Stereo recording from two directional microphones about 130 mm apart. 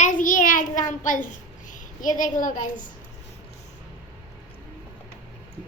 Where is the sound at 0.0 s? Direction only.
85° left.